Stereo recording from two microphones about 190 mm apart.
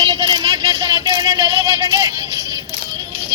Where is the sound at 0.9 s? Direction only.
20° right (ahead or behind).